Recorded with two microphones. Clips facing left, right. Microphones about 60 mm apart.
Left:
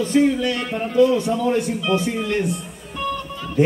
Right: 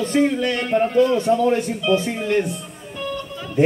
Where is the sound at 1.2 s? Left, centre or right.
Centre.